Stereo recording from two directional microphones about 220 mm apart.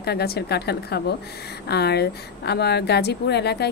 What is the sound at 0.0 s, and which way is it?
A woman's voice, 45° left (ahead or behind).